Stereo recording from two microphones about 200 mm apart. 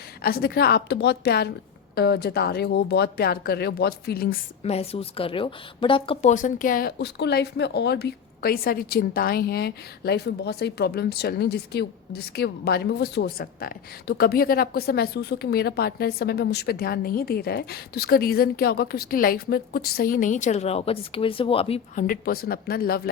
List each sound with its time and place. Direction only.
0.2 s a woman's voice: 50° left (ahead or behind)
4.6 s a woman's voice: 30° left (ahead or behind)
6.3 s a woman's voice: 40° left (ahead or behind)
21.9 s a woman's voice: 45° left (ahead or behind)